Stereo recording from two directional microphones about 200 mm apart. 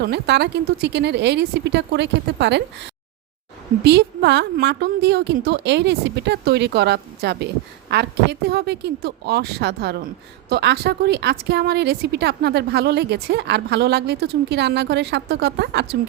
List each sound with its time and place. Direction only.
0.0 s a woman's voice: 60° right (ahead or behind)